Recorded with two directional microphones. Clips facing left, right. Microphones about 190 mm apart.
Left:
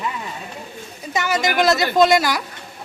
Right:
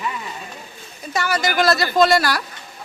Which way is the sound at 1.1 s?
20° left (ahead or behind).